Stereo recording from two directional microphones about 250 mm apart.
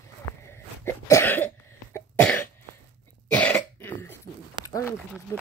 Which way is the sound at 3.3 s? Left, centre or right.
Centre.